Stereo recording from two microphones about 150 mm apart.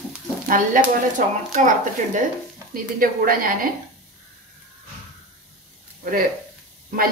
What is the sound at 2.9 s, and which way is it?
Speech, 70° right (ahead or behind).